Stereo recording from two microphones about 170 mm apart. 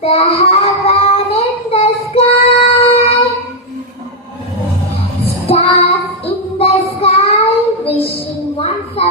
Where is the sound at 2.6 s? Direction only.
35° left (ahead or behind).